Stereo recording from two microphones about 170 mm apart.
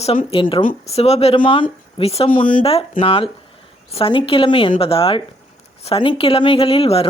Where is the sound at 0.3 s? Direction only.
30° left (ahead or behind).